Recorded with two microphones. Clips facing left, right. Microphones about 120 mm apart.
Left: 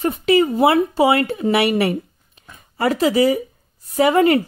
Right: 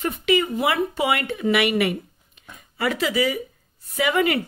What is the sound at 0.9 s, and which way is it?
Speech, 35° left (ahead or behind).